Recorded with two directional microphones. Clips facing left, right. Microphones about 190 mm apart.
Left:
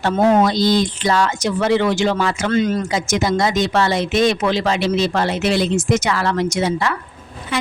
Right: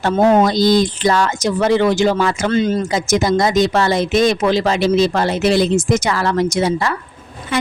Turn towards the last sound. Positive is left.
turn(degrees=-40)  # may be behind; listen again after turning